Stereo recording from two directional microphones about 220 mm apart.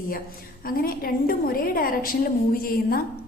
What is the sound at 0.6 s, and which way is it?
A woman's voice, 40° left (ahead or behind).